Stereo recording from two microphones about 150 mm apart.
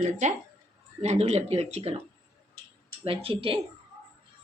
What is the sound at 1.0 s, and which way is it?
Speech, 45° right (ahead or behind).